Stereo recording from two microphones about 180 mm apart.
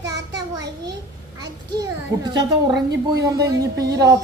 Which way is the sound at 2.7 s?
70° right (ahead or behind).